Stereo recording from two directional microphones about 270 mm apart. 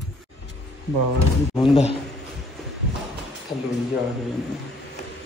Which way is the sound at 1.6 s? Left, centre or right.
Centre.